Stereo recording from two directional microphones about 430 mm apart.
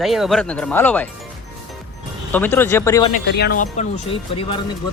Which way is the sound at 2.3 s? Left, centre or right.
Centre.